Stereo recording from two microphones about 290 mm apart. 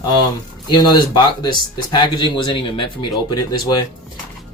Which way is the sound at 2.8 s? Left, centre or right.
Left.